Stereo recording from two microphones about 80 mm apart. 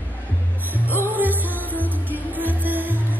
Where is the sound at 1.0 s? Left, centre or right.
Right.